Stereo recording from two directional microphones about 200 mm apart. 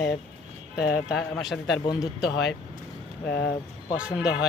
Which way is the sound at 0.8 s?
50° left (ahead or behind).